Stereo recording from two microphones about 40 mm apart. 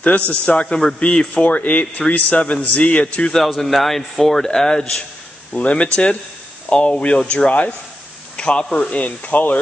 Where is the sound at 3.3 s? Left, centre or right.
Centre.